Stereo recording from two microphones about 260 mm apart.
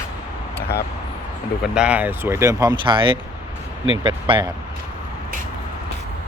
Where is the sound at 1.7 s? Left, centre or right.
Centre.